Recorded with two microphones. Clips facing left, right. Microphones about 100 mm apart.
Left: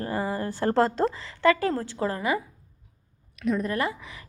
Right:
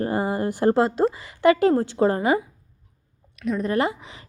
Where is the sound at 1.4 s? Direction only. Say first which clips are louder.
Right 5 dB; 20° right (ahead or behind).